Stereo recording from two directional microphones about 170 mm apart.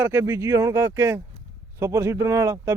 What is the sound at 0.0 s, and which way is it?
Speech, 15° right (ahead or behind).